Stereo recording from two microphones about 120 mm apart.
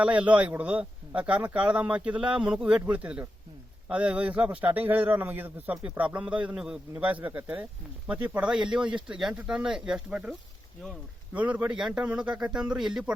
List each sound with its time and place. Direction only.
0.0 s a man's voice: 10° right (ahead or behind)
11.3 s a man's voice: 10° right (ahead or behind)